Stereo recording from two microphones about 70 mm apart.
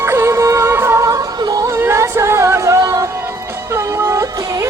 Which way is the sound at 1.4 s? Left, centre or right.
Right.